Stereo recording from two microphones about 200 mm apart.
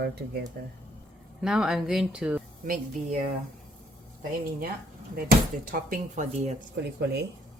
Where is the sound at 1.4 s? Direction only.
5° right (ahead or behind).